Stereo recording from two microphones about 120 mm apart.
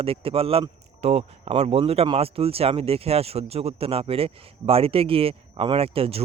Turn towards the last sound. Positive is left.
turn(degrees=-55)  # may be behind; listen again after turning